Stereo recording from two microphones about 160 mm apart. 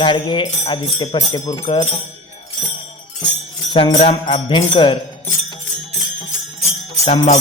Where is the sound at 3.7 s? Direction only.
40° left (ahead or behind).